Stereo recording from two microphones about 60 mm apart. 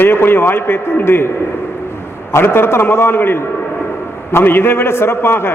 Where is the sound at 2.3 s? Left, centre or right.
Left.